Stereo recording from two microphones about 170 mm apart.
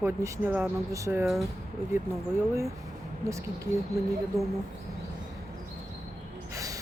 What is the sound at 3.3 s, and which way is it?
Speech, 15° right (ahead or behind).